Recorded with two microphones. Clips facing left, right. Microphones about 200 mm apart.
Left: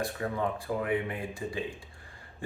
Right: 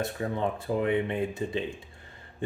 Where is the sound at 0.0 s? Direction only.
25° right (ahead or behind).